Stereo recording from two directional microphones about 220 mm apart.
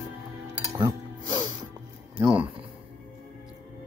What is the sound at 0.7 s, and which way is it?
Music, 20° right (ahead or behind).